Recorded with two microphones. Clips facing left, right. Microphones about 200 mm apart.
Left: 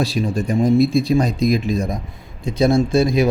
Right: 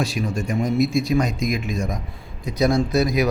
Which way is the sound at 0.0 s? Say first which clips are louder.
Left 4 dB; 35° left (ahead or behind).